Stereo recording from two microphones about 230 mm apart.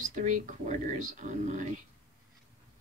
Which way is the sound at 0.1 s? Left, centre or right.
Right.